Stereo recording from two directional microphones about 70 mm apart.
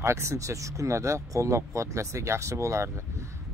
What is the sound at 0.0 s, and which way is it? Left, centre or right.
Speech, right.